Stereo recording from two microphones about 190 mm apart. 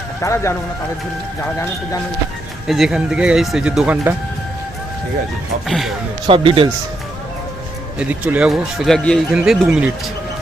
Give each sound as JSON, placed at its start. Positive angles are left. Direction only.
{"t": 0.2, "sound": "speech", "side_deg": 15}
{"t": 2.6, "sound": "speech", "side_deg": 0}
{"t": 5.6, "sound": "speech", "side_deg": 0}
{"t": 6.2, "sound": "speech", "side_deg": -25}
{"t": 7.9, "sound": "speech", "side_deg": -10}